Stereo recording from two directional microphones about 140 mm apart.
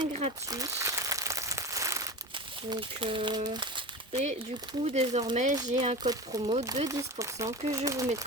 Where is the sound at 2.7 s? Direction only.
40° right (ahead or behind).